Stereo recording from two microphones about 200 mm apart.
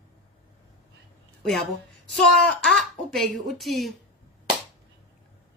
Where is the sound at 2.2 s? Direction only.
Centre (ahead or behind).